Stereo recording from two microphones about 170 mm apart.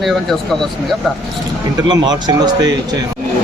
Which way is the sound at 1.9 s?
25° right (ahead or behind).